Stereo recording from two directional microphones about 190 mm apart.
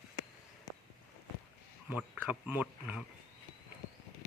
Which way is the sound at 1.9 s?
10° right (ahead or behind).